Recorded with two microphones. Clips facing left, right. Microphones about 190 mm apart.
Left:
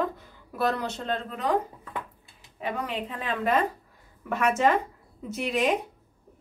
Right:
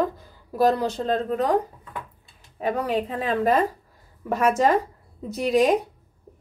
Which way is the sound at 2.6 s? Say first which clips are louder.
Right 7 dB; 40° right (ahead or behind).